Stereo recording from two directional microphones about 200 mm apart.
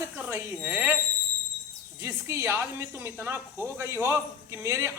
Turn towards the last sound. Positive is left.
turn(degrees=-15)  # may be behind; listen again after turning